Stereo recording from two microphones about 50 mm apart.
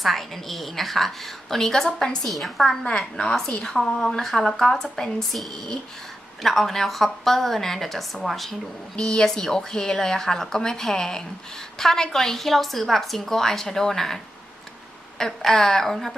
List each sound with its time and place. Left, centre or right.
0.0 s a woman's voice: centre
2.2 s a woman's voice: centre
9.0 s a woman's voice: centre
15.2 s a woman's voice: centre